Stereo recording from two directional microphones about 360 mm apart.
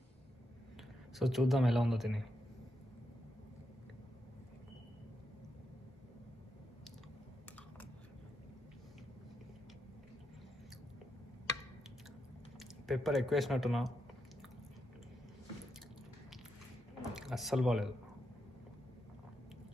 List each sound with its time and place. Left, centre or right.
1.1 s speech: centre
12.5 s speech: centre
17.0 s drip: centre